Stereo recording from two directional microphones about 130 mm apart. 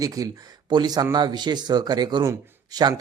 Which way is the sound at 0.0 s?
25° right (ahead or behind).